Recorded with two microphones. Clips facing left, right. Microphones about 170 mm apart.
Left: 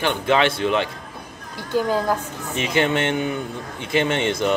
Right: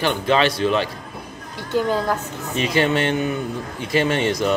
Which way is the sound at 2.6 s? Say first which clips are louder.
Right 1 dB; 20° left (ahead or behind).